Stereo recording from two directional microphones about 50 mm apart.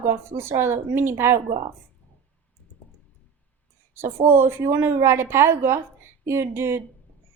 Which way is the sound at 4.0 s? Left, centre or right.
Right.